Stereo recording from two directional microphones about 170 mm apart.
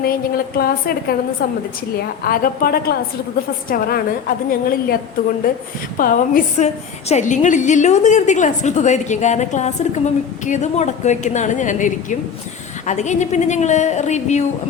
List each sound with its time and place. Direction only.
0.0 s a woman's voice: 60° left (ahead or behind)
6.0 s a woman's voice: 55° left (ahead or behind)